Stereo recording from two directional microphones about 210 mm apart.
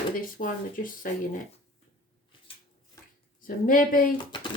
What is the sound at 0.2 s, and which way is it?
Speech, 40° left (ahead or behind).